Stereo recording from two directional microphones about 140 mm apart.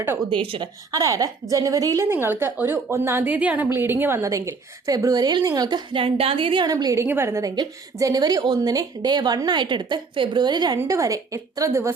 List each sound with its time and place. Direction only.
0.3 s speech: 40° right (ahead or behind)
0.9 s a woman's voice: 25° right (ahead or behind)